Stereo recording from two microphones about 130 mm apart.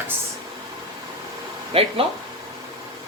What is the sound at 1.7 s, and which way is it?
Speech, 45° right (ahead or behind).